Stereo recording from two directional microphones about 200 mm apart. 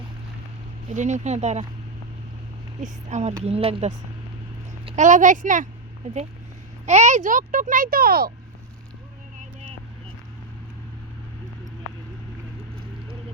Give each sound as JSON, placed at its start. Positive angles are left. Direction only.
{"t": 0.9, "sound": "a child's voice", "side_deg": -35}
{"t": 2.8, "sound": "a child's voice", "side_deg": -35}
{"t": 6.8, "sound": "a child's voice", "side_deg": -35}